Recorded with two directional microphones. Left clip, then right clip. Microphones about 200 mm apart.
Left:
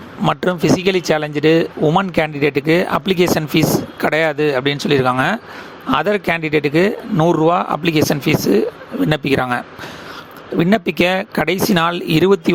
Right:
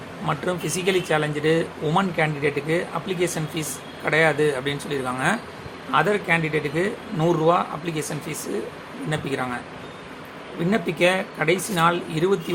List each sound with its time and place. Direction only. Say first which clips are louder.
0.3 s speech: left 10 dB; 45° left (ahead or behind)
10.7 s speech: left 4 dB; 50° left (ahead or behind)